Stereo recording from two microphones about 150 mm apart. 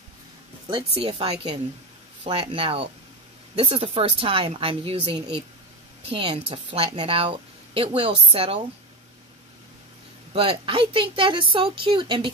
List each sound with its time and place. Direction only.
0.9 s a woman's voice: 40° right (ahead or behind)
10.3 s a woman's voice: 35° right (ahead or behind)